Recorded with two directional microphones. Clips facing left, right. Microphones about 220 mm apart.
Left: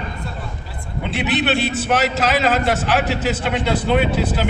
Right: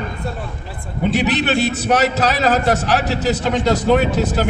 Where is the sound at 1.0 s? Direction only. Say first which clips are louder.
Right 3 dB; 40° right (ahead or behind).